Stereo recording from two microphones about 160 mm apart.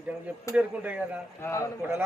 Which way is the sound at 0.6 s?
10° right (ahead or behind).